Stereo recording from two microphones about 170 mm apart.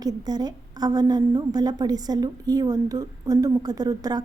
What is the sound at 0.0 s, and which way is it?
A woman's voice, 25° right (ahead or behind).